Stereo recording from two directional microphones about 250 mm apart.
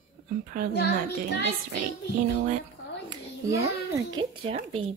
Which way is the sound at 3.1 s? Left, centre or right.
Centre.